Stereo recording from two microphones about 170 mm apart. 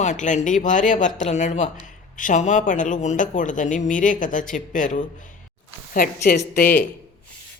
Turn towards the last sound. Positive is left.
turn(degrees=50)  # may be behind; listen again after turning